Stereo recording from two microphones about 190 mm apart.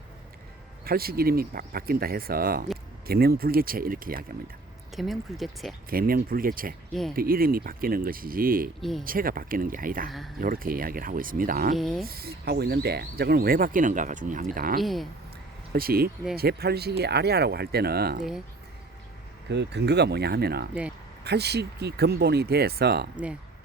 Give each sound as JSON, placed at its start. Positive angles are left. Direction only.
{"t": 0.9, "sound": "speech", "side_deg": -50}
{"t": 4.9, "sound": "speech", "side_deg": 0}
{"t": 5.9, "sound": "speech", "side_deg": -50}
{"t": 8.8, "sound": "speech", "side_deg": 0}
{"t": 9.0, "sound": "speech", "side_deg": -50}
{"t": 10.1, "sound": "speech", "side_deg": 0}
{"t": 10.4, "sound": "speech", "side_deg": -50}
{"t": 11.8, "sound": "speech", "side_deg": 0}
{"t": 12.0, "sound": "speech", "side_deg": -55}
{"t": 14.8, "sound": "speech", "side_deg": 0}
{"t": 15.7, "sound": "speech", "side_deg": -50}
{"t": 18.2, "sound": "speech", "side_deg": -5}
{"t": 19.5, "sound": "speech", "side_deg": -65}